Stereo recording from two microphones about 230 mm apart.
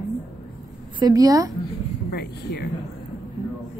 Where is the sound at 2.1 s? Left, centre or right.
Left.